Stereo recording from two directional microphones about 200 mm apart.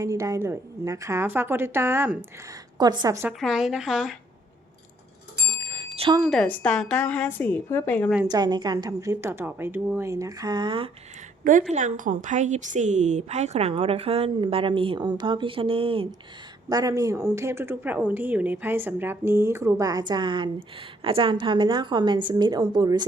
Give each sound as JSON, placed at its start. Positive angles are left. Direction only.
{"t": 0.0, "sound": "a woman's voice", "side_deg": -15}
{"t": 3.4, "sound": "a woman's voice", "side_deg": 0}
{"t": 5.5, "sound": "a sound", "side_deg": -25}
{"t": 6.2, "sound": "speech", "side_deg": 5}
{"t": 8.3, "sound": "speech", "side_deg": -20}
{"t": 11.7, "sound": "a woman's voice", "side_deg": -40}